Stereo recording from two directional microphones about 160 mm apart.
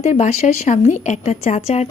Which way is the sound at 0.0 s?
45° left (ahead or behind).